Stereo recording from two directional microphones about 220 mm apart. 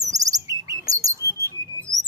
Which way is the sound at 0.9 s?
15° right (ahead or behind).